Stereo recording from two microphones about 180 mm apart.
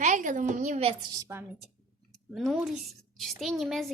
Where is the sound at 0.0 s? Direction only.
45° right (ahead or behind).